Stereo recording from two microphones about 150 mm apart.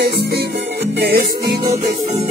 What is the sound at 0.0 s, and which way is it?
Music, 90° right.